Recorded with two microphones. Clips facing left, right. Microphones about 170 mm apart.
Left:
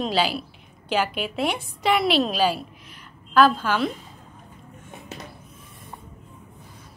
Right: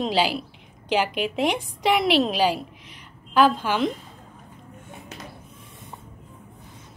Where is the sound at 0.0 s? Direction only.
15° right (ahead or behind).